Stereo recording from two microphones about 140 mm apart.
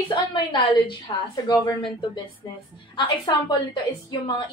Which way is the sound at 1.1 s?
35° left (ahead or behind).